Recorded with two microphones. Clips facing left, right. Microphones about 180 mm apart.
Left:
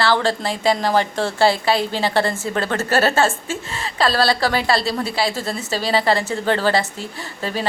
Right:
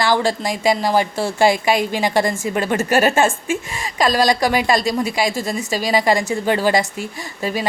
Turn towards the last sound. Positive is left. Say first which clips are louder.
# right 2 dB
turn(degrees=-10)  # may be behind; listen again after turning